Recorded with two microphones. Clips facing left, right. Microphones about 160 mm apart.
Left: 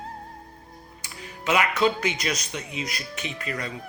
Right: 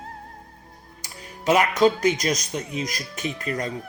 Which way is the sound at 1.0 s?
40° right (ahead or behind).